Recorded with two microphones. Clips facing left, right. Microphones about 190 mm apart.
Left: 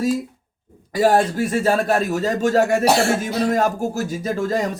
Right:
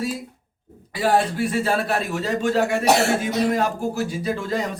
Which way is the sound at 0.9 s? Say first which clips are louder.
Left 4 dB; 45° left (ahead or behind).